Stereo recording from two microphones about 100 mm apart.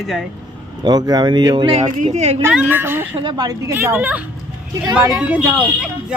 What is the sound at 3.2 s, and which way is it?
Speech, 45° right (ahead or behind).